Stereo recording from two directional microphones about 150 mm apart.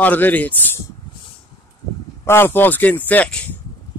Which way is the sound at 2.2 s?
15° left (ahead or behind).